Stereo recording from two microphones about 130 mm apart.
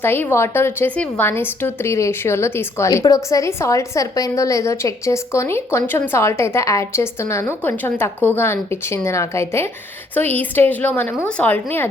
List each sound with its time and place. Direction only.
0.0 s a woman's voice: 15° left (ahead or behind)